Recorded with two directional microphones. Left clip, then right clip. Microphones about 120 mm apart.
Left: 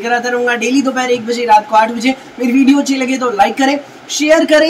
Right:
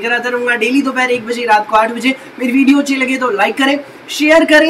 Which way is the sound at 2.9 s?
10° left (ahead or behind).